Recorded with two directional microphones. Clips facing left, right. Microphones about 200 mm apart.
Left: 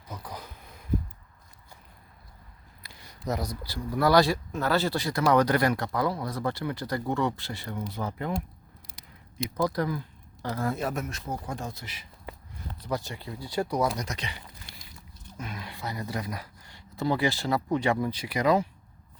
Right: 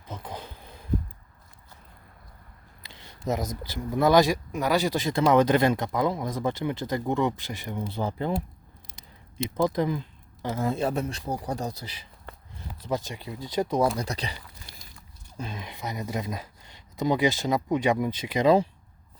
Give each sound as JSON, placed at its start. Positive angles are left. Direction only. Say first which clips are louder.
{"t": 0.1, "sound": "a sound", "louder": "right 3 dB", "side_deg": -25}
{"t": 2.8, "sound": "a sound", "louder": "right 3 dB", "side_deg": -25}
{"t": 3.6, "sound": "speech", "louder": "right 2 dB", "side_deg": -20}
{"t": 7.9, "sound": "speech", "louder": "right 5 dB", "side_deg": -30}
{"t": 8.9, "sound": "a sound", "louder": "even", "side_deg": 0}
{"t": 9.6, "sound": "speech", "louder": "right 3 dB", "side_deg": -20}
{"t": 12.9, "sound": "speech", "louder": "right 2 dB", "side_deg": -15}
{"t": 13.9, "sound": "speech", "louder": "right 3 dB", "side_deg": -35}
{"t": 15.4, "sound": "speech", "louder": "right 2 dB", "side_deg": -25}